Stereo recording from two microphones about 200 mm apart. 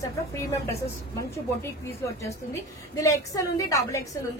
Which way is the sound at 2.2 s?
15° left (ahead or behind).